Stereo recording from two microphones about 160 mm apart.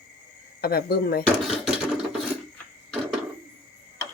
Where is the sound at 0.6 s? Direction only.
70° left (ahead or behind).